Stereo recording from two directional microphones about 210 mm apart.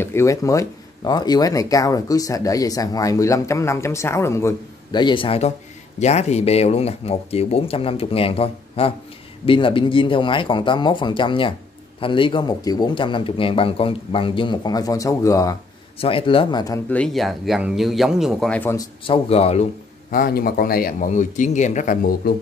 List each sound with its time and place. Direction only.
0.0 s speech: 15° left (ahead or behind)
19.0 s speech: 30° left (ahead or behind)
20.1 s speech: 45° left (ahead or behind)